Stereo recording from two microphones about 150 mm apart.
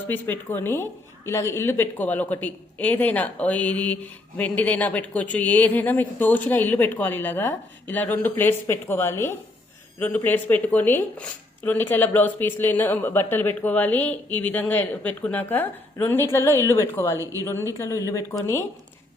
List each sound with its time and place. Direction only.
0.1 s a woman's voice: 15° left (ahead or behind)